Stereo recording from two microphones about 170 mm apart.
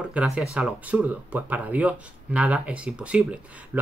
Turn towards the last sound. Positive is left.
turn(degrees=-5)  # may be behind; listen again after turning